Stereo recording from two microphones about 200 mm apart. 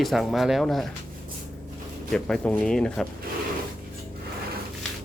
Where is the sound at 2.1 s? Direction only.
5° left (ahead or behind).